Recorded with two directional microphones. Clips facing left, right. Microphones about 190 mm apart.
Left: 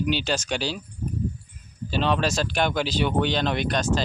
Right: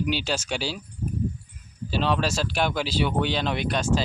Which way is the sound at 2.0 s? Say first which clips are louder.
Left 1 dB; 5° right (ahead or behind).